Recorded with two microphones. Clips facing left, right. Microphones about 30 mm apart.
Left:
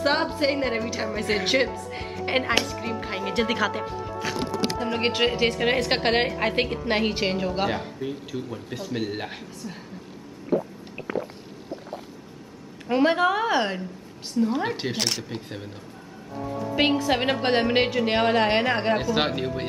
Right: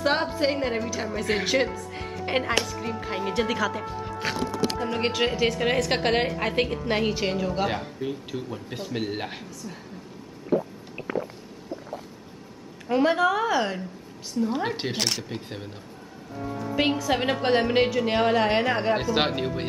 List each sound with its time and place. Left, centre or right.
0.0 s a woman's voice: centre
4.2 s speech: right
4.7 s a woman's voice: centre
6.2 s a woman's voice: centre
7.7 s speech: centre
8.9 s speech: centre
10.5 s a sound: centre
12.8 s a woman's voice: centre
14.5 s speech: centre
16.7 s a woman's voice: centre
18.9 s speech: centre